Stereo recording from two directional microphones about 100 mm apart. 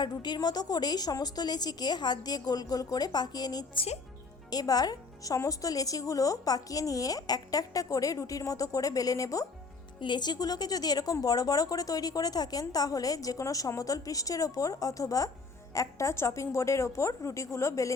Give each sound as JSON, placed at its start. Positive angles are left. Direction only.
{"t": 0.0, "sound": "a woman's voice", "side_deg": 45}
{"t": 10.0, "sound": "a woman's voice", "side_deg": 50}